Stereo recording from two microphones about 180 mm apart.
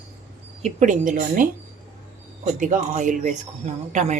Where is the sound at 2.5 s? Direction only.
45° right (ahead or behind).